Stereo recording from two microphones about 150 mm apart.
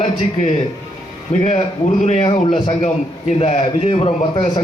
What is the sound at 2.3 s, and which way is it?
Speech, 35° left (ahead or behind).